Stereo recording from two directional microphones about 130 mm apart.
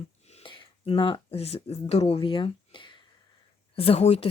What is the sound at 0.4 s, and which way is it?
Speech, 40° left (ahead or behind).